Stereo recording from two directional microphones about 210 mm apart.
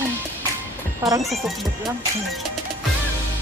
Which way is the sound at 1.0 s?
15° right (ahead or behind).